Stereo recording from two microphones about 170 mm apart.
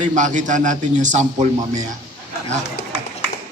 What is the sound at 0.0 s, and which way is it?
A man's voice, 45° right (ahead or behind).